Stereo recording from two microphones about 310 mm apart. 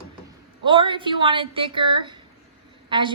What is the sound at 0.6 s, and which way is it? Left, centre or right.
Speech, centre.